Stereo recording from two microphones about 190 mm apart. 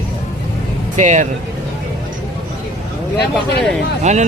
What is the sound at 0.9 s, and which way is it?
Speech, 40° right (ahead or behind).